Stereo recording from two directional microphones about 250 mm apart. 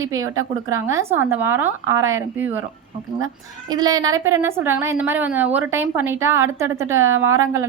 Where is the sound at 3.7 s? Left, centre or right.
Centre.